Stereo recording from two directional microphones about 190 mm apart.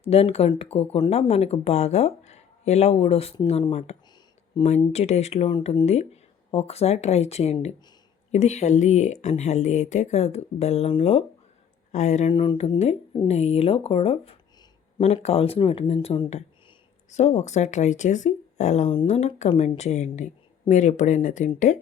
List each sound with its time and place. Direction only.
0.0 s speech: 30° left (ahead or behind)
1.3 s speech: 35° left (ahead or behind)
5.8 s speech: 35° left (ahead or behind)
12.3 s speech: 25° left (ahead or behind); by 21.5 s 40° left (ahead or behind)